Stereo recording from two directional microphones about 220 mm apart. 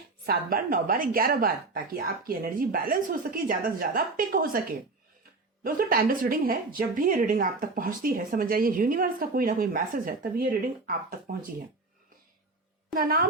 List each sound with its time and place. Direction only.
0.3 s a woman's voice: 40° right (ahead or behind)
5.6 s a woman's voice: 40° right (ahead or behind)
12.9 s a woman's voice: 40° right (ahead or behind)